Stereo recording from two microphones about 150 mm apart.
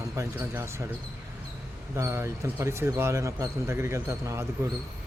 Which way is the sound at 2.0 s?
20° right (ahead or behind).